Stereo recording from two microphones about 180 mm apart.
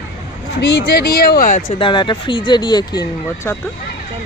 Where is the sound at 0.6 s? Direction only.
70° left (ahead or behind); by 1.8 s 40° left (ahead or behind).